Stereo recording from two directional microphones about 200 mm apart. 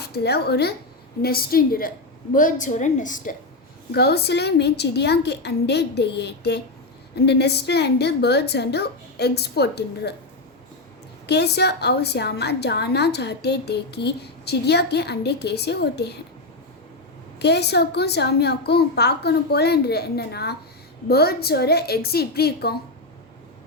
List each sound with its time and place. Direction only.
0.0 s a woman's voice: 55° left (ahead or behind)
3.9 s a woman's voice: 55° left (ahead or behind)
11.3 s a woman's voice: 55° left (ahead or behind)
17.4 s a woman's voice: 55° left (ahead or behind)